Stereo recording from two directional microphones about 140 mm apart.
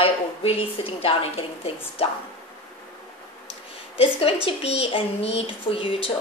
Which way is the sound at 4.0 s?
45° left (ahead or behind).